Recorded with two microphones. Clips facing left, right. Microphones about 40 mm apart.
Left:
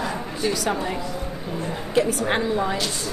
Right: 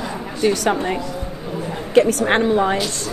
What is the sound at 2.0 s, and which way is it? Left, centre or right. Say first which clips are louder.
Speech: right 7 dB; right.